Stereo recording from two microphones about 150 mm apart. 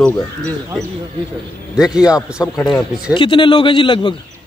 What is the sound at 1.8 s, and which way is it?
Speech, 5° right (ahead or behind).